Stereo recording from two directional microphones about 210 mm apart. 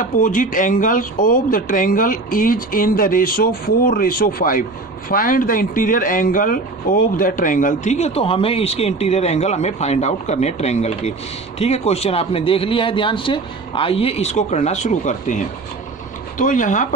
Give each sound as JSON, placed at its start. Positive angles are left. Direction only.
{"t": 0.0, "sound": "speech", "side_deg": 40}